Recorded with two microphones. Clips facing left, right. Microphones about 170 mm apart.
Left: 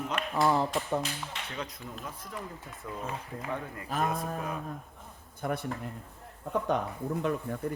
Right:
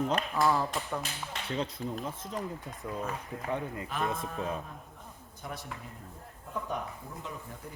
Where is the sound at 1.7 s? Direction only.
25° right (ahead or behind).